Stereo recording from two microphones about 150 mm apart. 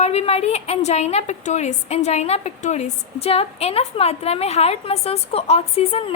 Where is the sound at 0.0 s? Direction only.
45° left (ahead or behind).